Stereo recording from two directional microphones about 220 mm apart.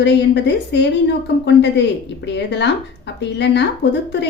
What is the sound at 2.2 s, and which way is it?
Speech, 50° left (ahead or behind).